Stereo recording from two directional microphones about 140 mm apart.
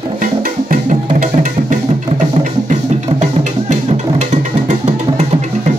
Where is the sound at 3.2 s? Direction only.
55° right (ahead or behind).